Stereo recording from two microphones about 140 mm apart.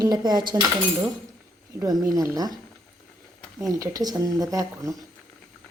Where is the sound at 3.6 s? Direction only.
25° right (ahead or behind).